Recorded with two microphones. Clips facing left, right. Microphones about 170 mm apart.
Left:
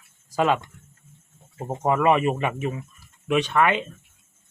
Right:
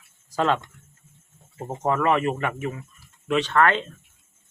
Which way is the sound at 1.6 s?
10° left (ahead or behind).